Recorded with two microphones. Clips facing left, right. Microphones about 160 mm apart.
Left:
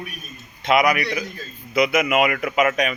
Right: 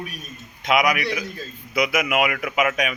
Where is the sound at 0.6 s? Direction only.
Centre (ahead or behind).